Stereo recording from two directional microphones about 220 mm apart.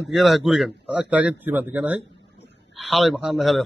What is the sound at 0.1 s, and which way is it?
A man's voice, centre (ahead or behind).